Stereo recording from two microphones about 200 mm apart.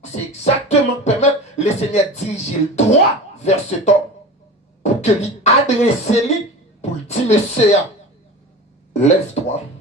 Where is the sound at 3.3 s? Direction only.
35° left (ahead or behind).